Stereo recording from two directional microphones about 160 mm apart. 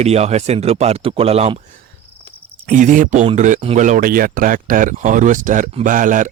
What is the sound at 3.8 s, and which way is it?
Speech, 55° right (ahead or behind).